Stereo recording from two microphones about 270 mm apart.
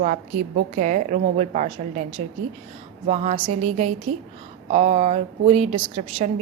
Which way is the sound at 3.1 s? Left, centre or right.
Right.